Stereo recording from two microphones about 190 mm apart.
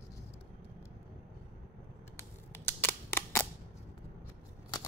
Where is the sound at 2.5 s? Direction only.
10° left (ahead or behind).